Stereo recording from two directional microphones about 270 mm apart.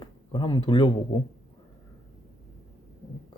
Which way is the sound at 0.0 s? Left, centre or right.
Centre.